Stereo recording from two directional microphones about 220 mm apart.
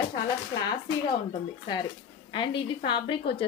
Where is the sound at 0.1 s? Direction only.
20° left (ahead or behind).